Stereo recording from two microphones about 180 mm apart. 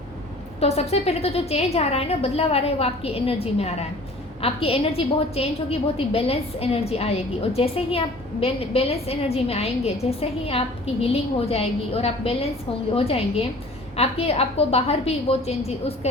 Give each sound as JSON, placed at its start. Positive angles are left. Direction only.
{"t": 0.6, "sound": "a woman's voice", "side_deg": 35}